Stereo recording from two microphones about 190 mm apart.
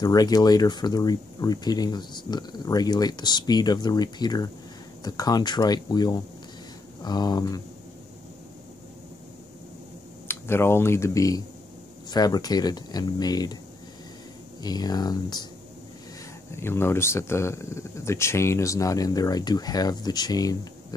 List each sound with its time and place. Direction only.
0.0 s speech: 20° left (ahead or behind)
10.2 s speech: 15° left (ahead or behind)
14.6 s speech: 20° left (ahead or behind)
16.5 s speech: 15° left (ahead or behind)